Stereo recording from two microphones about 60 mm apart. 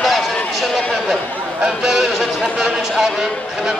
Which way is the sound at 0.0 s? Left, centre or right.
Centre.